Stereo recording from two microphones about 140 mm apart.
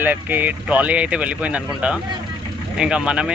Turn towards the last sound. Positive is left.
turn(degrees=-5)  # may be behind; listen again after turning